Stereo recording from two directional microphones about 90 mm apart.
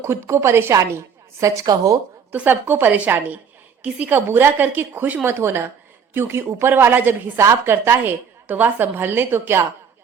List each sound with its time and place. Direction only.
0.0 s a woman's voice: 30° right (ahead or behind)
2.3 s a woman's voice: 20° right (ahead or behind)